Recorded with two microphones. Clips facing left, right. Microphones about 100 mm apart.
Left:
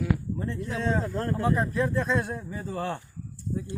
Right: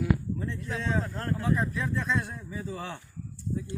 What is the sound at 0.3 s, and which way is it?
Speech, 40° left (ahead or behind).